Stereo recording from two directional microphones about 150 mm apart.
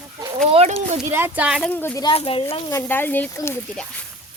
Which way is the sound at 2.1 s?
35° left (ahead or behind).